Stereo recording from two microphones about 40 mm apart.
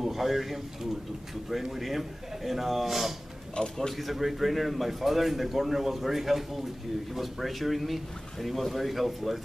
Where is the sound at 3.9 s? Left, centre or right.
Centre.